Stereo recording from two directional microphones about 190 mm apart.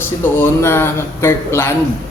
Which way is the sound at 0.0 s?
10° left (ahead or behind).